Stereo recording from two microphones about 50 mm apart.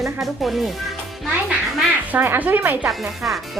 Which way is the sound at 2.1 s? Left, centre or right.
Right.